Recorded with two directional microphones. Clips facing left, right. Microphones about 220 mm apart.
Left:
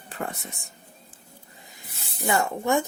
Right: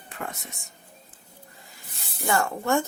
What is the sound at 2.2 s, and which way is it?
Speech, 15° left (ahead or behind).